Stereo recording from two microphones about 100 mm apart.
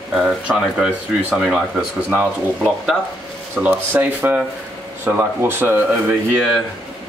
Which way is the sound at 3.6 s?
15° right (ahead or behind).